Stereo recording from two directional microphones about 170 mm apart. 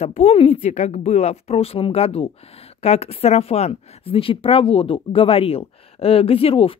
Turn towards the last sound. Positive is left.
turn(degrees=35)  # may be behind; listen again after turning